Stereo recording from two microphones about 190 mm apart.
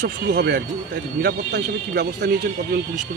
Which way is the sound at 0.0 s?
60° right (ahead or behind).